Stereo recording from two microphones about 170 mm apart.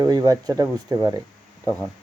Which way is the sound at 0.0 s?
20° right (ahead or behind).